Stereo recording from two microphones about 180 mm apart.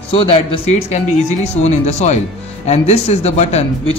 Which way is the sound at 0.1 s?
30° left (ahead or behind).